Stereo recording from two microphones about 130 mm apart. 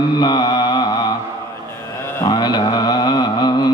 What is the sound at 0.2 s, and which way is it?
Mantra, 35° left (ahead or behind).